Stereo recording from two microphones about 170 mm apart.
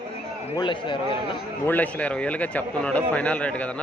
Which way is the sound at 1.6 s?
10° left (ahead or behind).